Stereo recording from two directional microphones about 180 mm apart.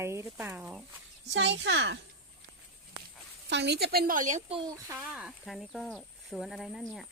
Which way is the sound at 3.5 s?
70° right (ahead or behind).